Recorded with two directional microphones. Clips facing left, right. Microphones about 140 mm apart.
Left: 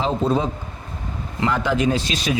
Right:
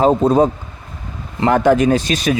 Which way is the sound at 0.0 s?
45° right (ahead or behind).